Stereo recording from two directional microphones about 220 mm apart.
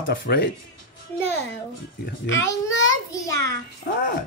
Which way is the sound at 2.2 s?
55° left (ahead or behind).